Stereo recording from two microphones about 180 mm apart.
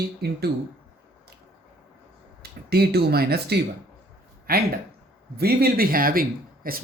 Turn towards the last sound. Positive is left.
turn(degrees=-55)  # may be behind; listen again after turning